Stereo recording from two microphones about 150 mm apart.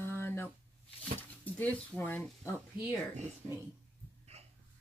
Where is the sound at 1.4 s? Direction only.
10° left (ahead or behind).